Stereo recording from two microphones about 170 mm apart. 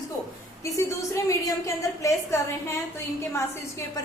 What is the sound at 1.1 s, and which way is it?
A woman's voice, 20° left (ahead or behind).